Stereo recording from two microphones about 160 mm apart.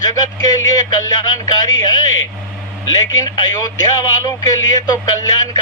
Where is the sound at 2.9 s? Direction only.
25° left (ahead or behind).